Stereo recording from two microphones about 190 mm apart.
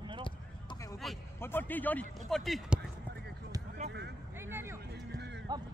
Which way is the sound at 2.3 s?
Centre (ahead or behind).